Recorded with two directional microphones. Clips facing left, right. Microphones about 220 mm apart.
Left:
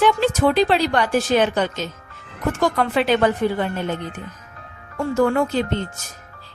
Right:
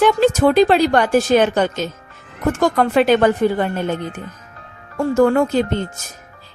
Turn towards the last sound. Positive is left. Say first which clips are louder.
# right 4 dB
turn(degrees=-45)  # may be behind; listen again after turning